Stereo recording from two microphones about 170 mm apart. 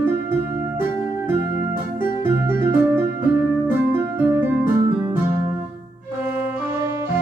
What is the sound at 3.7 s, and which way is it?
Music, 10° right (ahead or behind).